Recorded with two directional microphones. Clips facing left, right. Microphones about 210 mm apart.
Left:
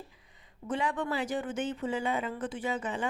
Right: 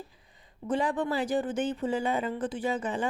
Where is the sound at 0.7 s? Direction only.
35° right (ahead or behind).